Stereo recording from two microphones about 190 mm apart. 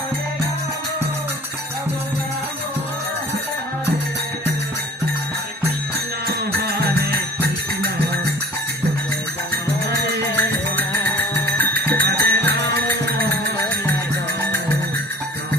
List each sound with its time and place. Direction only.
6.2 s music: 55° right (ahead or behind)
10.3 s music: 10° left (ahead or behind)
11.7 s music: 55° right (ahead or behind)